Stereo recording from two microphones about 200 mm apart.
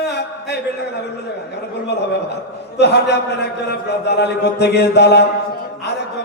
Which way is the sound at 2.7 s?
55° left (ahead or behind).